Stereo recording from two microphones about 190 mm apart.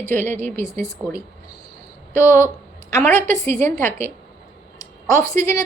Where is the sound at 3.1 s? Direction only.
40° right (ahead or behind).